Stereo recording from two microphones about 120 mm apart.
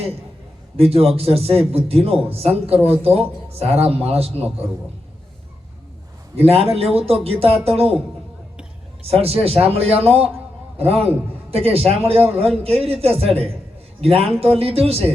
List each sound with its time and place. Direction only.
0.8 s a man's voice: 55° right (ahead or behind)
6.3 s a man's voice: 55° right (ahead or behind)
9.0 s a man's voice: 55° right (ahead or behind)